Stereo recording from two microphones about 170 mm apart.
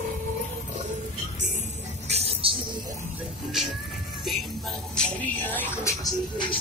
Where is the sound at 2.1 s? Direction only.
35° right (ahead or behind).